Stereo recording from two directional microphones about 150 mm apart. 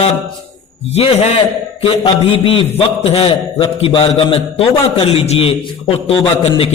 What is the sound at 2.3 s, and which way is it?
A man's voice, 40° left (ahead or behind).